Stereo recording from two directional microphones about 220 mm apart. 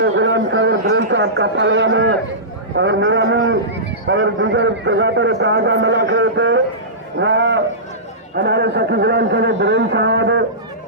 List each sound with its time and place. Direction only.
0.0 s a man's voice: 55° right (ahead or behind)